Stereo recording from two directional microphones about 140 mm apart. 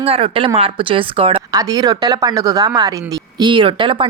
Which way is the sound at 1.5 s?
25° right (ahead or behind).